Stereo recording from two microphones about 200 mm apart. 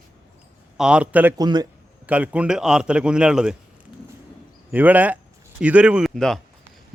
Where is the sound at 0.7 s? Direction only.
5° right (ahead or behind).